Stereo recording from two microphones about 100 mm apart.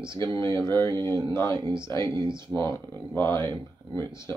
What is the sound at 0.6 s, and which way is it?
Mantra, 25° left (ahead or behind).